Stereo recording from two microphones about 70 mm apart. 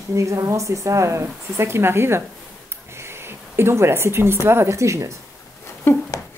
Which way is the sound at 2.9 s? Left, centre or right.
Right.